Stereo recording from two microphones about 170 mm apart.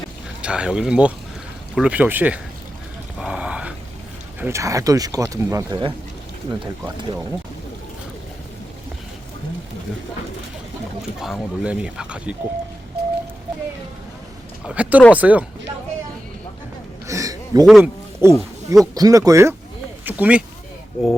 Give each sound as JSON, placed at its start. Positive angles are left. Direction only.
{"t": 0.4, "sound": "speech", "side_deg": -5}
{"t": 3.2, "sound": "a sound", "side_deg": -5}
{"t": 4.4, "sound": "speech", "side_deg": -15}
{"t": 11.2, "sound": "speech", "side_deg": -5}
{"t": 14.6, "sound": "speech", "side_deg": -5}
{"t": 17.1, "sound": "a sound", "side_deg": -20}
{"t": 17.7, "sound": "speech", "side_deg": 0}
{"t": 18.2, "sound": "a sound", "side_deg": -15}
{"t": 18.9, "sound": "speech", "side_deg": -20}